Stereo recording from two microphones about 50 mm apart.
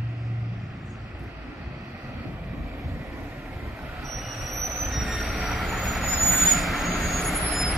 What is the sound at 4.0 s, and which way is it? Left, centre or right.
Vehicle, centre.